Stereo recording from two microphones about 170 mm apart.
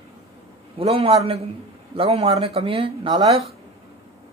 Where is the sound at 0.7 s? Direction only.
35° right (ahead or behind).